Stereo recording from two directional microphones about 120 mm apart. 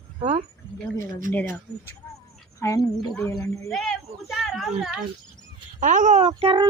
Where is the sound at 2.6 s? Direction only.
25° left (ahead or behind).